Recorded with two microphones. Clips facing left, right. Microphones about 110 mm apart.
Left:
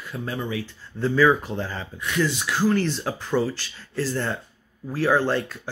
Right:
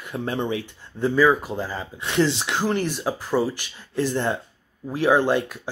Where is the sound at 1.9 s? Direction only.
30° right (ahead or behind).